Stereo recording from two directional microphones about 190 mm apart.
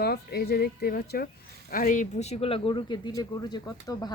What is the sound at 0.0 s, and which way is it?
Speech, 55° left (ahead or behind).